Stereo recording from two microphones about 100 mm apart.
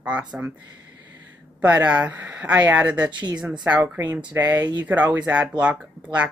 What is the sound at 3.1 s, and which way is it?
Speech, 50° right (ahead or behind).